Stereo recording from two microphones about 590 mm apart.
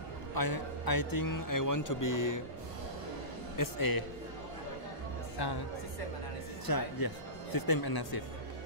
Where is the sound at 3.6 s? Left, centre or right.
Left.